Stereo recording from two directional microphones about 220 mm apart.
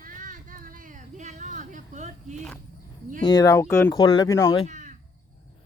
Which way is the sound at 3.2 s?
20° left (ahead or behind).